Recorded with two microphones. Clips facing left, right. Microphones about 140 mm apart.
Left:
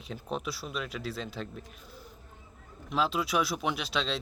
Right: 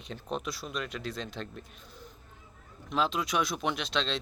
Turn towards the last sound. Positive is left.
turn(degrees=5)  # may be behind; listen again after turning